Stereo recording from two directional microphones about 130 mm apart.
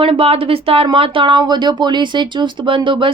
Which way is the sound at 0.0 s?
45° right (ahead or behind).